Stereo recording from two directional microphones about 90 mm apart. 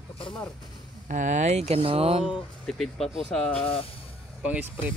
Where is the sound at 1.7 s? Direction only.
90° right.